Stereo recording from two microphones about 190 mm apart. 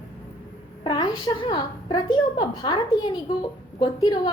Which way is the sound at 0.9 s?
25° left (ahead or behind).